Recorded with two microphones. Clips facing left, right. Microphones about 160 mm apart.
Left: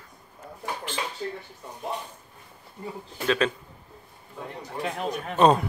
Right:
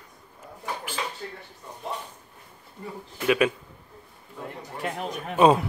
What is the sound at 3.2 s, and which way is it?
Speech, 10° right (ahead or behind).